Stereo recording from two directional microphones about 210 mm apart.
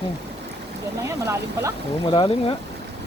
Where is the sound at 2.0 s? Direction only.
25° left (ahead or behind).